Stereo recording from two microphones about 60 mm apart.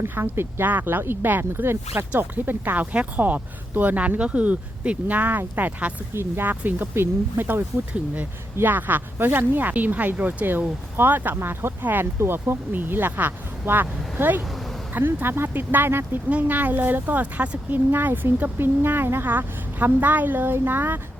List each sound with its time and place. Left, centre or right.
0.0 s speech: right
0.7 s speech: right
8.6 s speech: right
11.8 s speech: right
12.2 s speech: right
16.3 s speech: right